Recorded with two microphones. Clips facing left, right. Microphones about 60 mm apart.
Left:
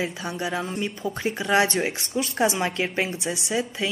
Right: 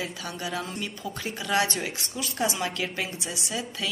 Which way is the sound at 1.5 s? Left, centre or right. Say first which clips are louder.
Left 4 dB; left.